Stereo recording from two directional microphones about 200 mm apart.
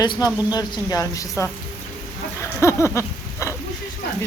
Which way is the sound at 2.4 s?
15° left (ahead or behind).